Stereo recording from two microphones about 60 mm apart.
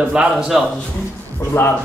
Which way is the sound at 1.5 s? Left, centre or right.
Left.